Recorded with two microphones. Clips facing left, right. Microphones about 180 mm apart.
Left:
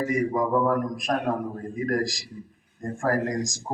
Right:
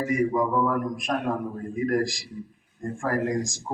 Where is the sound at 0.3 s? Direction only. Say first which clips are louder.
Left 1 dB; 40° left (ahead or behind).